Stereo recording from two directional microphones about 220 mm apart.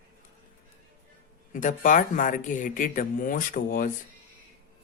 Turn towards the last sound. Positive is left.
turn(degrees=40)  # may be behind; listen again after turning